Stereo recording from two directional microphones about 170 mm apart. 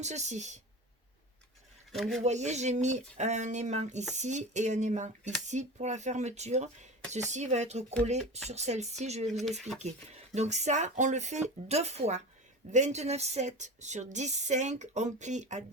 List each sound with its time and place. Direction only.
0.0 s speech: 40° right (ahead or behind)
1.9 s speech: centre (ahead or behind)
2.2 s speech: 40° right (ahead or behind)
9.4 s speech: centre (ahead or behind)
9.7 s speech: 40° right (ahead or behind)